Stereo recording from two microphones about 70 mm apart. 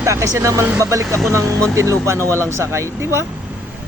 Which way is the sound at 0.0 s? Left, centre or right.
Right.